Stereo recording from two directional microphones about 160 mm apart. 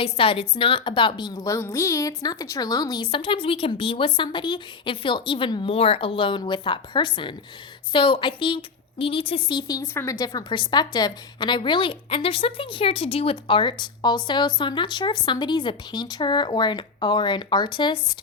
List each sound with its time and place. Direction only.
0.0 s a woman's voice: 35° left (ahead or behind)